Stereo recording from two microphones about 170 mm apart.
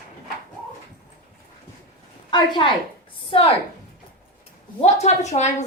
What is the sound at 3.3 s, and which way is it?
Speech, 35° left (ahead or behind).